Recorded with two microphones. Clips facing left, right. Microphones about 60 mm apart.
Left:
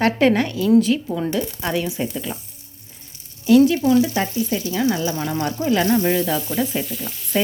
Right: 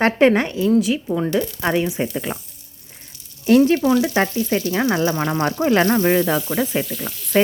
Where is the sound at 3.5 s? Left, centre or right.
Right.